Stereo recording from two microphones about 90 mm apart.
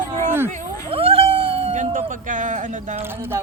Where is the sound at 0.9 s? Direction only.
90° right.